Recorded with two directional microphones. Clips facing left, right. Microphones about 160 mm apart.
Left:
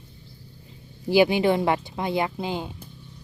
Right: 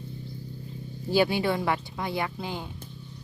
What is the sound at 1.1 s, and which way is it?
Speech, 15° left (ahead or behind).